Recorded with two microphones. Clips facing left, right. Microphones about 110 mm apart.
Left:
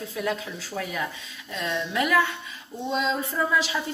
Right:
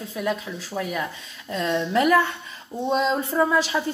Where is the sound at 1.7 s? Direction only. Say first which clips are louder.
Right 6 dB; 35° right (ahead or behind).